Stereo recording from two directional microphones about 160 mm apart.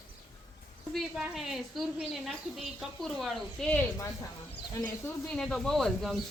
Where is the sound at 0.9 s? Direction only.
Centre (ahead or behind); by 5.3 s 15° left (ahead or behind).